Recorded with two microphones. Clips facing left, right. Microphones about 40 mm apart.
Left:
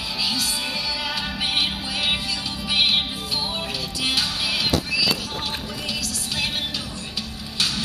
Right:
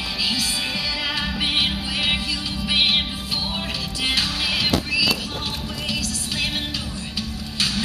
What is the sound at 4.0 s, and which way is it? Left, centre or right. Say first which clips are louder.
Music: right 1 dB; right.